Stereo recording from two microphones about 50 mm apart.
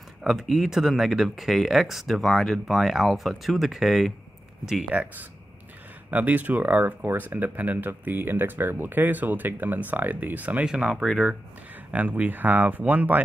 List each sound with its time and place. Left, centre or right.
0.2 s speech: centre
6.0 s speech: right
7.1 s speech: right
10.6 s speech: centre
11.9 s speech: right